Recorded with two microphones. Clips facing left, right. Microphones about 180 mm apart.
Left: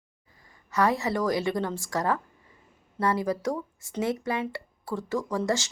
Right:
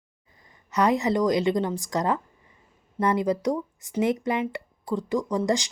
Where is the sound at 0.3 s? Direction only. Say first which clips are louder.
Right 1 dB; 20° right (ahead or behind).